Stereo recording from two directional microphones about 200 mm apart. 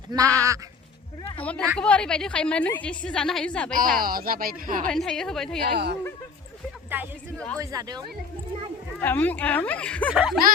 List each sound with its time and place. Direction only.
0.1 s bleat: 20° right (ahead or behind)
1.4 s a woman's voice: 5° left (ahead or behind)
4.0 s speech: 45° right (ahead or behind)
4.9 s a woman's voice: centre (ahead or behind)
5.7 s speech: 55° right (ahead or behind)
6.9 s speech: 10° right (ahead or behind)
7.3 s a woman's voice: 5° left (ahead or behind)
7.6 s speech: 15° right (ahead or behind)
9.0 s a woman's voice: 10° left (ahead or behind)